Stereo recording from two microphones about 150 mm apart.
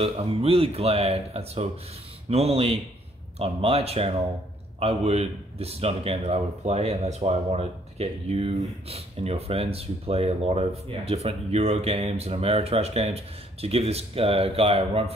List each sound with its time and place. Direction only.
0.0 s speech: 40° right (ahead or behind)